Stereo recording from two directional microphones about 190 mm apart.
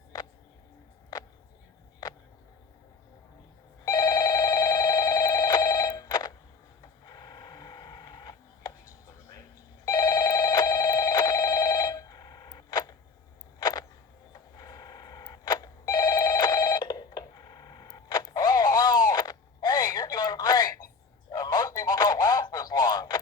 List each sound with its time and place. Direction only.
3.8 s telephone bell ringing: 20° left (ahead or behind)
6.8 s printer: 20° left (ahead or behind)
9.8 s telephone bell ringing: 20° left (ahead or behind)
13.6 s a sound: 20° left (ahead or behind)
14.3 s telephone bell ringing: 20° left (ahead or behind)
21.2 s a sound: 20° left (ahead or behind)